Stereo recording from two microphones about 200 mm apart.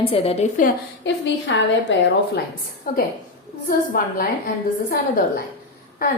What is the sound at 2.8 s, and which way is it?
A woman's voice, 45° left (ahead or behind).